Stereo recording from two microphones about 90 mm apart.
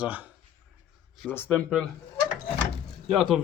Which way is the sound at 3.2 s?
Centre (ahead or behind).